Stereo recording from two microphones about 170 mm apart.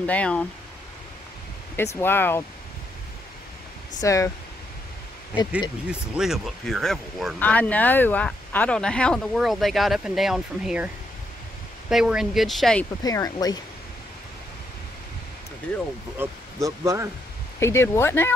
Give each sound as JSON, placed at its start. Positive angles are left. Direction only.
{"t": 0.0, "sound": "speech", "side_deg": 10}
{"t": 2.0, "sound": "speech", "side_deg": 10}
{"t": 4.0, "sound": "speech", "side_deg": 20}
{"t": 5.9, "sound": "speech", "side_deg": -5}
{"t": 11.9, "sound": "speech", "side_deg": -5}
{"t": 13.0, "sound": "speech", "side_deg": 20}
{"t": 16.2, "sound": "speech", "side_deg": -20}
{"t": 17.6, "sound": "speech", "side_deg": 15}